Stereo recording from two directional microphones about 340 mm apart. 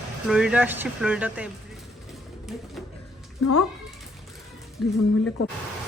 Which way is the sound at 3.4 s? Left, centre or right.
Left.